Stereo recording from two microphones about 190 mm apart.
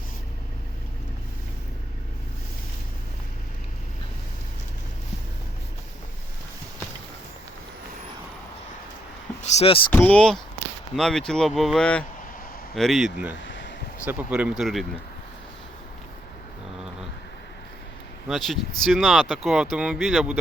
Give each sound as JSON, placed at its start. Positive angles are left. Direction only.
{"t": 9.4, "sound": "speech", "side_deg": 35}
{"t": 9.9, "sound": "speech", "side_deg": 10}
{"t": 13.4, "sound": "a sound", "side_deg": 75}
{"t": 14.0, "sound": "speech", "side_deg": -5}
{"t": 18.3, "sound": "speech", "side_deg": 0}